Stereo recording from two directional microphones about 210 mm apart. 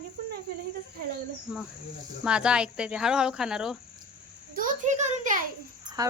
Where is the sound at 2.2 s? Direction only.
5° right (ahead or behind).